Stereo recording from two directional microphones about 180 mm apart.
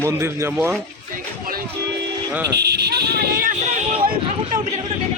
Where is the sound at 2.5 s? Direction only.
65° right (ahead or behind).